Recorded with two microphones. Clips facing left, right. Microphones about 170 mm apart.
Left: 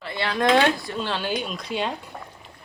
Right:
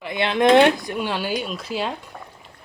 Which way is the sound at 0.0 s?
20° right (ahead or behind).